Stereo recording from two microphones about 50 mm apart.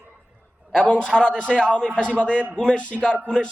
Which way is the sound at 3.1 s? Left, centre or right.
Left.